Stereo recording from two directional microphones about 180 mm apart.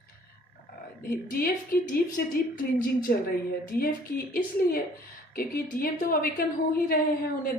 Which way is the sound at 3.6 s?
55° left (ahead or behind).